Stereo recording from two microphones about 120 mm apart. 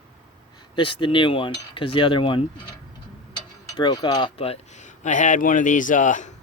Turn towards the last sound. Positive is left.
turn(degrees=90)